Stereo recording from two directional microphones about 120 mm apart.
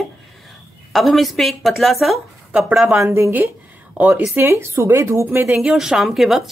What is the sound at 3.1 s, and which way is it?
Speech, 20° right (ahead or behind).